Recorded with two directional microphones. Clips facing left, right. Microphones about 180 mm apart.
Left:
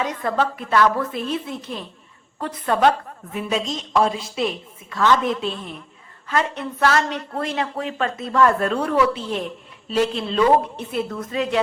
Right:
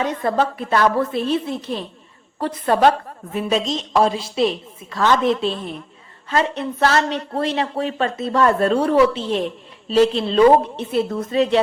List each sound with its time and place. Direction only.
0.0 s a woman's voice: 30° right (ahead or behind)